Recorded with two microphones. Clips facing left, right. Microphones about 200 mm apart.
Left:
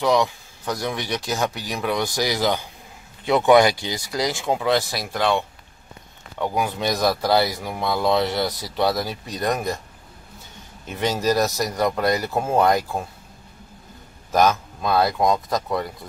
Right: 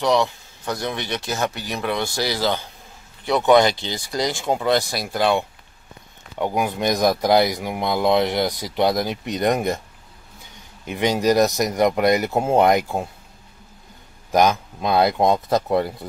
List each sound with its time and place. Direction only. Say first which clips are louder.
0.0 s speech: even; 10° left (ahead or behind); by 9.8 s 20° right (ahead or behind)
10.9 s speech: right 3 dB; 15° right (ahead or behind)
14.3 s speech: right 1 dB; 15° right (ahead or behind)